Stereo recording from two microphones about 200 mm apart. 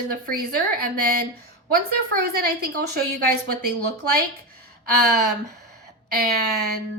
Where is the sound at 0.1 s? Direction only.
45° right (ahead or behind).